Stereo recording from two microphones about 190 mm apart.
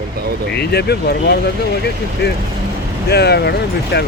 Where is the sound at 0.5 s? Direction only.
60° left (ahead or behind).